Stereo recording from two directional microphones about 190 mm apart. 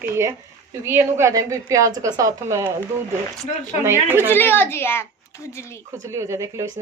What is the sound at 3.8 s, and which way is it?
Speech, 10° right (ahead or behind).